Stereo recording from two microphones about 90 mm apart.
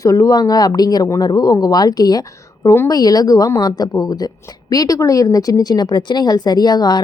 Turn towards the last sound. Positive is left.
turn(degrees=50)  # may be behind; listen again after turning